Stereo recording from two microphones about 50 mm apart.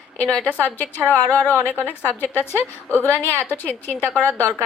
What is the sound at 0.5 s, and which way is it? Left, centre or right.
A woman's voice, left.